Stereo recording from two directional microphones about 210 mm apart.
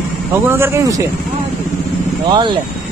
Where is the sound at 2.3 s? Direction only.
20° right (ahead or behind).